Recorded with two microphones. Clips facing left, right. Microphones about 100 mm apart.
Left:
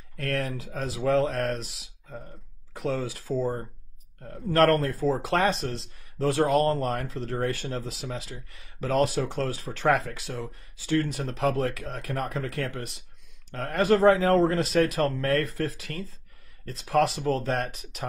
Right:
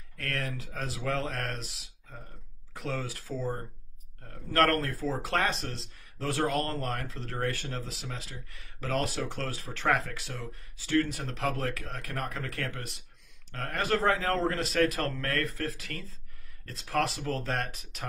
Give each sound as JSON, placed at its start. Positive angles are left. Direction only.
{"t": 0.2, "sound": "speech", "side_deg": 20}
{"t": 2.7, "sound": "speech", "side_deg": 20}